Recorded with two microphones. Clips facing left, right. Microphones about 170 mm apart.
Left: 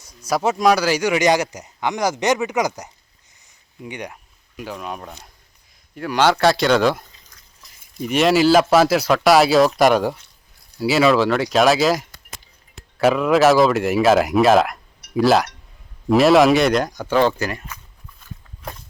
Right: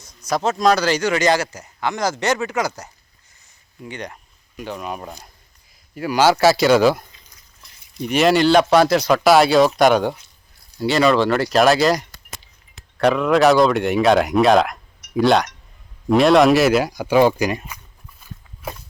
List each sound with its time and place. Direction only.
0.0 s speech: 10° left (ahead or behind)
8.0 s speech: centre (ahead or behind); by 17.7 s 15° right (ahead or behind)